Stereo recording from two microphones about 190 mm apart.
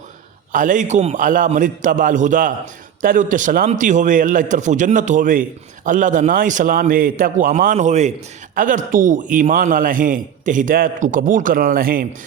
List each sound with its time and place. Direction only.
0.5 s a man's voice: 45° right (ahead or behind)